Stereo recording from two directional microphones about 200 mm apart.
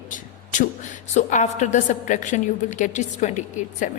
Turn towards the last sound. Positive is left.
turn(degrees=40)  # may be behind; listen again after turning